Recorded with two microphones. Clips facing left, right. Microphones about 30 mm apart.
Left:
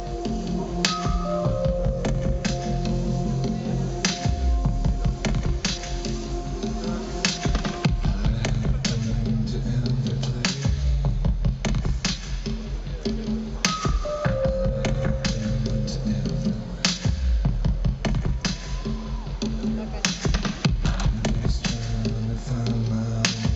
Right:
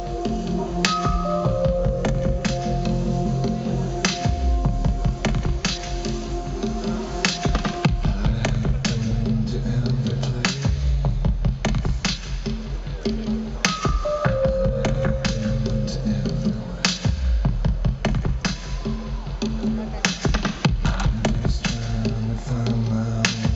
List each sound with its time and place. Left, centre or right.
0.2 s music: centre
2.8 s music: centre
13.0 s music: centre
15.0 s music: centre